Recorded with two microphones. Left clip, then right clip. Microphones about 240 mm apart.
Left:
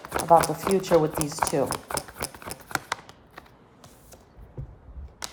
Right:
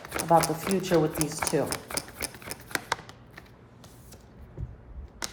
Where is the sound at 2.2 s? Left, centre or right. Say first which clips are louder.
Left 2 dB; centre.